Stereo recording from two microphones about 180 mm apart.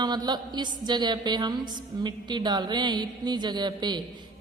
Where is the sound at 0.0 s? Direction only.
25° right (ahead or behind).